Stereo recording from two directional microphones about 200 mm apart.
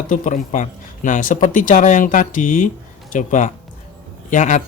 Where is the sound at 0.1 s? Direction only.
40° left (ahead or behind).